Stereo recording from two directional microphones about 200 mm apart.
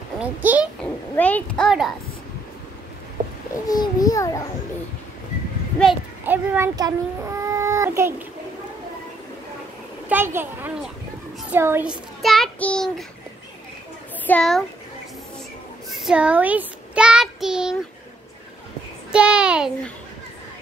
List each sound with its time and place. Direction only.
0.2 s a child's voice: 5° right (ahead or behind)
1.1 s a woman's voice: 5° left (ahead or behind)
3.6 s a child's voice: 20° left (ahead or behind)
6.2 s a child's voice: 10° right (ahead or behind)
10.0 s a child's voice: 10° right (ahead or behind)
14.2 s a child's voice: 5° left (ahead or behind)
15.9 s child singing: centre (ahead or behind)
19.1 s a child's voice: 5° right (ahead or behind)